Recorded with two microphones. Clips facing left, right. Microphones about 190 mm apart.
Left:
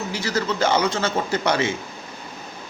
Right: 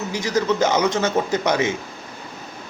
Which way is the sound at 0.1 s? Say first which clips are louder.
Right 6 dB; 15° right (ahead or behind).